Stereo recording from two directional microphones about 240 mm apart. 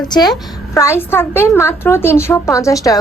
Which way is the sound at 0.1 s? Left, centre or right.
Centre.